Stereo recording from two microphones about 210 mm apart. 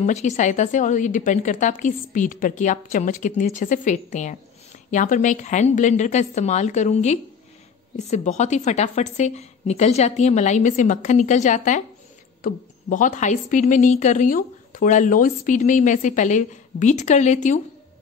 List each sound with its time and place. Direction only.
0.0 s a woman's voice: 35° left (ahead or behind)